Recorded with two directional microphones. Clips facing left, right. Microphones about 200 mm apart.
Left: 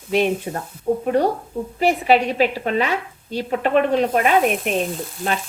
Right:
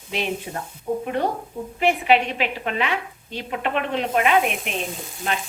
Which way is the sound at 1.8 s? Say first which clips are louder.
Left 2 dB; 40° left (ahead or behind).